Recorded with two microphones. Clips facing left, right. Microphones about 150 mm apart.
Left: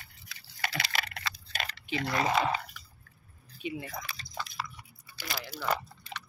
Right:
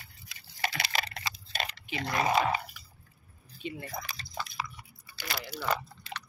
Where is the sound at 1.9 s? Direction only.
20° right (ahead or behind).